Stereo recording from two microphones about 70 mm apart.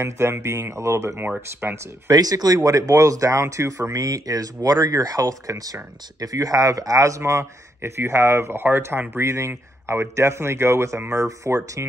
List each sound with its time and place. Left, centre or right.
0.0 s speech: right
1.6 s speech: right
2.0 s speech: right
9.2 s speech: right